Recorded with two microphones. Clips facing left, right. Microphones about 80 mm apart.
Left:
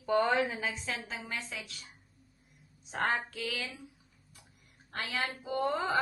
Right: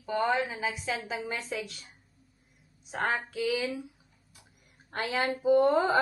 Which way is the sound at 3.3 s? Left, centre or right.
Centre.